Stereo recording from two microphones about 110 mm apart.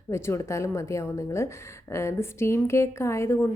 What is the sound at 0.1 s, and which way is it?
A woman's voice, 25° left (ahead or behind).